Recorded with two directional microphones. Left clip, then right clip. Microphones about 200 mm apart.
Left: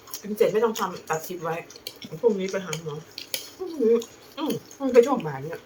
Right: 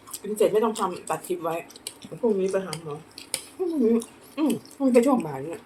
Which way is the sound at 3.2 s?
15° right (ahead or behind).